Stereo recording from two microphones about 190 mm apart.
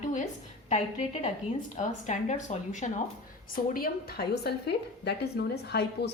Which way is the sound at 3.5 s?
50° left (ahead or behind).